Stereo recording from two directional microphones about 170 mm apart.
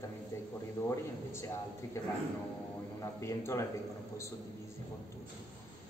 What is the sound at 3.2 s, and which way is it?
Speech, 15° left (ahead or behind).